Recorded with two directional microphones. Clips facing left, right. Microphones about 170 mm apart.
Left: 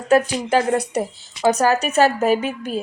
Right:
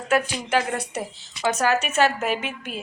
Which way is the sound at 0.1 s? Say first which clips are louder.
Left 6 dB; 35° left (ahead or behind).